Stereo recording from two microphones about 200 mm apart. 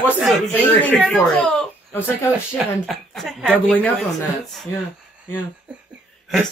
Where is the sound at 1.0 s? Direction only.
5° left (ahead or behind).